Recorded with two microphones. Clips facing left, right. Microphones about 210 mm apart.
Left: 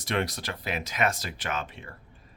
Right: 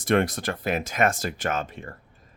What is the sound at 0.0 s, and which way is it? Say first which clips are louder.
Speech: right 7 dB; 50° right (ahead or behind).